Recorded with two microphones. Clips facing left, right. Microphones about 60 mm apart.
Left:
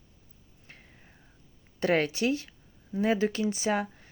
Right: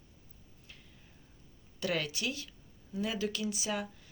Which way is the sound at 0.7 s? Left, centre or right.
Left.